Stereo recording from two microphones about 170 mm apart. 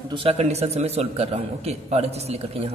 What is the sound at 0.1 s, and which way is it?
A man's voice, 35° right (ahead or behind).